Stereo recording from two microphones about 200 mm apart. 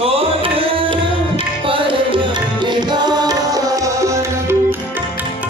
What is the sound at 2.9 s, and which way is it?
Tabla, 20° right (ahead or behind).